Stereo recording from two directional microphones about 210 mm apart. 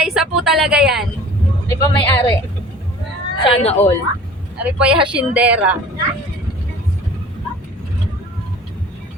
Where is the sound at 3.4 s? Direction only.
30° left (ahead or behind).